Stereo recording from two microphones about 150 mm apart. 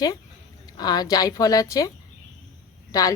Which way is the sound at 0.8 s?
25° left (ahead or behind).